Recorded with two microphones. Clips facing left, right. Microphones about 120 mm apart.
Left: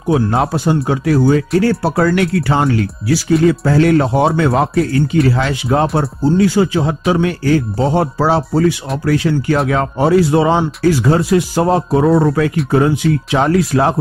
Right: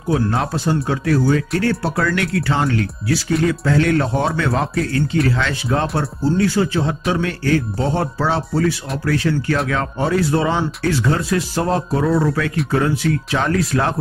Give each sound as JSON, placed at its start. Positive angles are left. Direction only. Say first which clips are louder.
{"t": 0.1, "sound": "speech", "louder": "left 5 dB", "side_deg": 25}